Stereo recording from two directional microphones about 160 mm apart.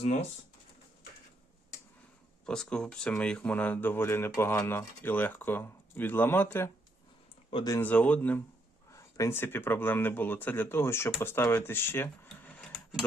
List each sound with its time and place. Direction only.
0.0 s speech: 45° left (ahead or behind)
2.5 s speech: 5° left (ahead or behind)
7.5 s speech: 25° left (ahead or behind)
7.8 s speech: 10° left (ahead or behind)
12.7 s a sound: centre (ahead or behind)